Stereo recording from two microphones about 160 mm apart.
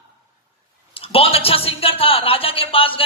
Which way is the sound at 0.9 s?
35° left (ahead or behind).